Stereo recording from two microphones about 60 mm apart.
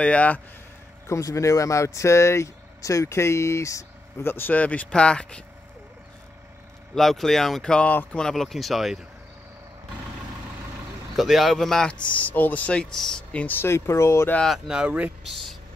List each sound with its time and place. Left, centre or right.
0.0 s speech: left
1.0 s speech: left
4.2 s speech: left; by 5.4 s centre
7.0 s speech: centre
11.1 s speech: centre
11.9 s speech: left
12.9 s speech: centre
13.3 s speech: left
13.6 s speech: left
14.7 s speech: centre
15.2 s speech: centre